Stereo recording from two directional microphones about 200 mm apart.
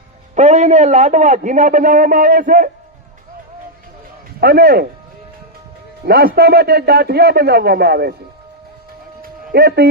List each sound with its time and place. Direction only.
0.3 s a man's voice: 35° right (ahead or behind)
4.4 s a man's voice: 50° right (ahead or behind)
6.1 s a man's voice: 50° right (ahead or behind)
9.2 s music: 50° right (ahead or behind)